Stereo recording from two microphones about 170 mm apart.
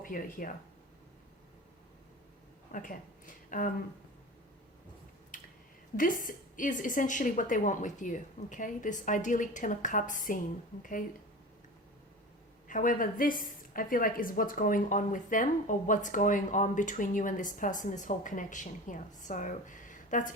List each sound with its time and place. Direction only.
0.0 s a woman's voice: 55° left (ahead or behind)
2.7 s a woman's voice: 50° left (ahead or behind)
6.0 s a woman's voice: 50° left (ahead or behind)
12.6 s a woman's voice: 50° left (ahead or behind)